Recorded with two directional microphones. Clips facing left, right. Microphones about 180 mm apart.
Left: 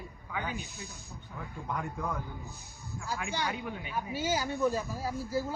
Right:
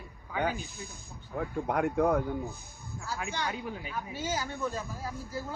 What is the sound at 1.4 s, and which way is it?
A man's voice, 65° right (ahead or behind).